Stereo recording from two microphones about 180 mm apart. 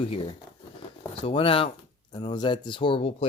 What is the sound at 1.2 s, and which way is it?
Speech, 30° left (ahead or behind).